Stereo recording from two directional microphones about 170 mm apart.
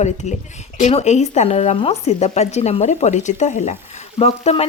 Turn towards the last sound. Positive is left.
turn(degrees=40)  # may be behind; listen again after turning